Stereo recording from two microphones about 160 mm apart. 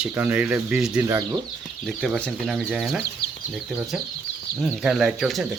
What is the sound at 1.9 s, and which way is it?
Speech, 5° left (ahead or behind).